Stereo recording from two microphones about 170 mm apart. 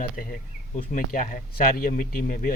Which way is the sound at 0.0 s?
55° left (ahead or behind).